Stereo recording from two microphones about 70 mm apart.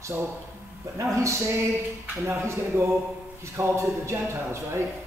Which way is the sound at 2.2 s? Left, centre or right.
Right.